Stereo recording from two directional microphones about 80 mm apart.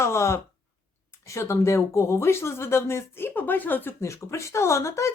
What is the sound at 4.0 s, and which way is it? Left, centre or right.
Speech, left.